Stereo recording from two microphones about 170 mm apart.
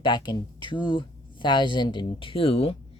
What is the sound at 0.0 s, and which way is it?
Speech, 25° left (ahead or behind).